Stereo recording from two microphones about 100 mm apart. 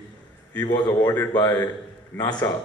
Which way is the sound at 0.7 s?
45° left (ahead or behind).